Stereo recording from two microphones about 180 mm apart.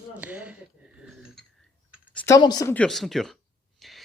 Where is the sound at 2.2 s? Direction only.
20° left (ahead or behind).